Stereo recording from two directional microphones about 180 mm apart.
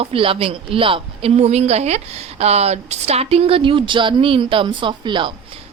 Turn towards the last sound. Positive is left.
turn(degrees=-25)  # may be behind; listen again after turning